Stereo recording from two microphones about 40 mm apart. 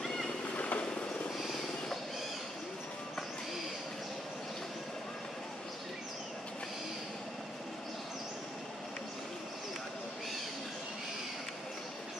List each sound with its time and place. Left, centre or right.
0.0 s boat: centre
0.6 s vehicle: left
1.4 s vehicle: centre